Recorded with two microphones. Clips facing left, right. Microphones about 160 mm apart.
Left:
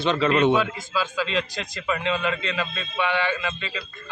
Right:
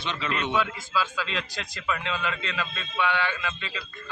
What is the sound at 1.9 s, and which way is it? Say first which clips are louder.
Speech: left 9 dB; 30° left (ahead or behind).